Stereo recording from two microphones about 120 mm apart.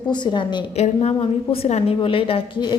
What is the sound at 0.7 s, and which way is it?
A woman's voice, 60° left (ahead or behind).